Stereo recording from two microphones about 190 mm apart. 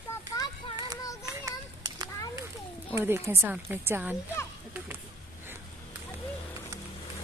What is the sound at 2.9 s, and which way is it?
Speech, 15° right (ahead or behind).